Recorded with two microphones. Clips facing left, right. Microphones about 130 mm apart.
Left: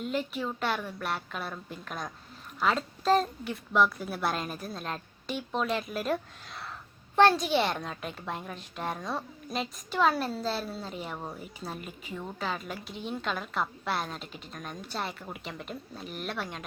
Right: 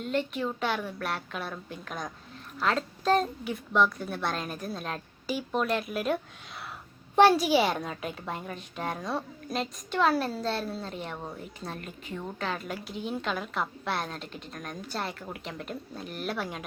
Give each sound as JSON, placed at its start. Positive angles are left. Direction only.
{"t": 0.0, "sound": "a woman's voice", "side_deg": 0}